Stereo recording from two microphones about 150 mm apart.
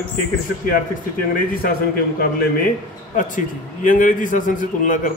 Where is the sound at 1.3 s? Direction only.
80° left.